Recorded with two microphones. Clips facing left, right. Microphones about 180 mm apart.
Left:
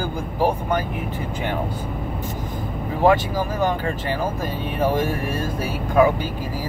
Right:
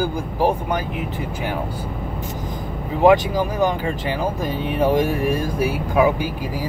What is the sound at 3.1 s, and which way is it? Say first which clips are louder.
Speech: right 3 dB; 15° right (ahead or behind).